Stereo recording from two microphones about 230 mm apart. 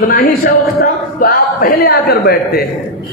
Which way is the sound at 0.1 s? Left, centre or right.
Left.